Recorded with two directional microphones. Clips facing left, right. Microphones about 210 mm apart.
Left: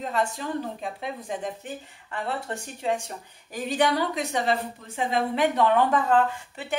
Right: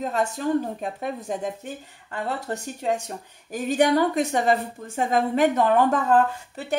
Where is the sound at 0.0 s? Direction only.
45° right (ahead or behind).